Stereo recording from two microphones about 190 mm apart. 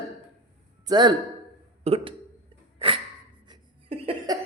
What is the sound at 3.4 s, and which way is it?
Laughter, 25° right (ahead or behind).